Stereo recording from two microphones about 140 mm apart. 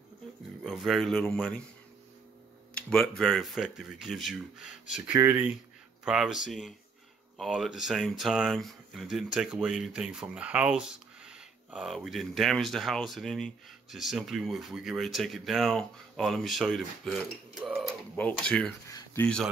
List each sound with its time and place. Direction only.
0.7 s speech: centre (ahead or behind)
2.7 s speech: 5° left (ahead or behind)
5.1 s speech: 20° right (ahead or behind)
6.0 s speech: 5° right (ahead or behind)